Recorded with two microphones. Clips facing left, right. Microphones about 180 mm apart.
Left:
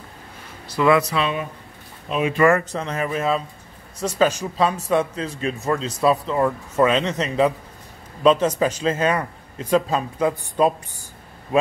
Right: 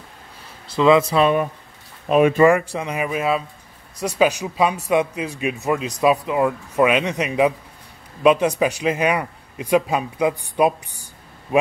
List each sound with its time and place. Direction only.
0.7 s speech: 20° right (ahead or behind)
1.1 s speech: 50° right (ahead or behind)
2.3 s a man's voice: 15° right (ahead or behind)